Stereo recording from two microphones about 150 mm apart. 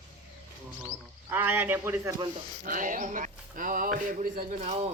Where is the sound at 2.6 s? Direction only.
60° right (ahead or behind).